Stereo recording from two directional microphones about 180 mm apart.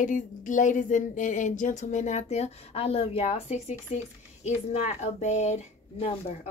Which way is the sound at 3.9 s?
35° left (ahead or behind).